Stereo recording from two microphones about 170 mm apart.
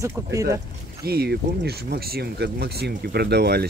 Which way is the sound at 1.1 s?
70° right (ahead or behind).